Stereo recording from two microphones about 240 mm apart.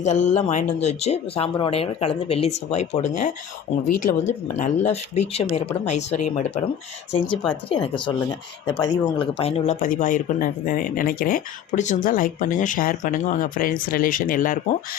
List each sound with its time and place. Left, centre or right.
0.0 s speech: left
7.7 s speech: centre